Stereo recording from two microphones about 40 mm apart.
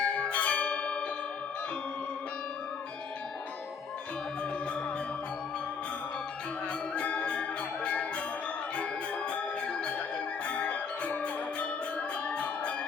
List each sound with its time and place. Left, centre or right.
0.0 s bell: left
6.9 s music: left
8.7 s organ: left
10.4 s music: left